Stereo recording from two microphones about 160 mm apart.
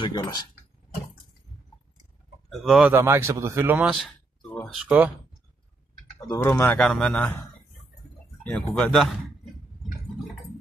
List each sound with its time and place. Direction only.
0.0 s speech: 25° left (ahead or behind)
2.5 s speech: centre (ahead or behind)
2.9 s speech: 15° right (ahead or behind)
6.1 s speech: 15° left (ahead or behind)
6.8 s speech: 5° left (ahead or behind)
8.5 s speech: 5° left (ahead or behind)